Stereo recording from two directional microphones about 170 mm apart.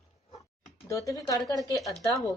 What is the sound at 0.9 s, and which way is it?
Speech, 20° left (ahead or behind).